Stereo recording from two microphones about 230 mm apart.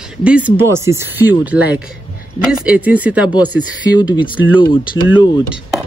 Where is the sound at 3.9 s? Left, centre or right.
Centre.